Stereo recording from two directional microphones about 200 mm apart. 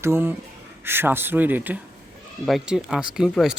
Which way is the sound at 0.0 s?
10° right (ahead or behind).